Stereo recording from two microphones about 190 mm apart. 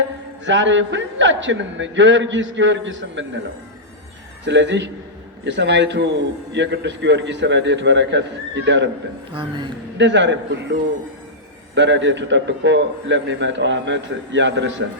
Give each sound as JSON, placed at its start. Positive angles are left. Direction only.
{"t": 0.4, "sound": "a man's voice", "side_deg": -75}
{"t": 4.4, "sound": "a man's voice", "side_deg": -70}
{"t": 9.3, "sound": "a man's voice", "side_deg": -25}
{"t": 10.0, "sound": "a man's voice", "side_deg": -70}